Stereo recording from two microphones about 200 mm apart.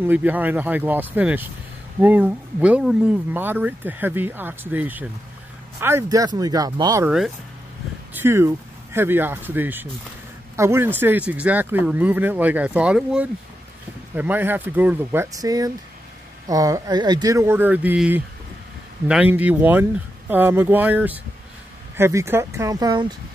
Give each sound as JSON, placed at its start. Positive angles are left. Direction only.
{"t": 0.0, "sound": "speech", "side_deg": -10}
{"t": 8.1, "sound": "speech", "side_deg": -10}